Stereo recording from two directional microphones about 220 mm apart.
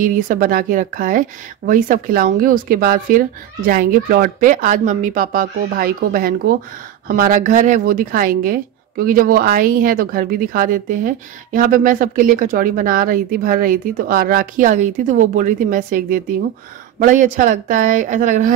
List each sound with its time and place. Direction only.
0.0 s a woman's voice: 40° right (ahead or behind)